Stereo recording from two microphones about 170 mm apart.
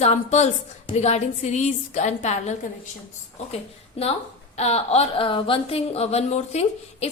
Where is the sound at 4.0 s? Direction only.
35° left (ahead or behind).